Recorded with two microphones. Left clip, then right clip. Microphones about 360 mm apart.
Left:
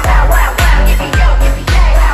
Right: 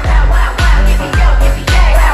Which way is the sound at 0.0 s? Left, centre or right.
Centre.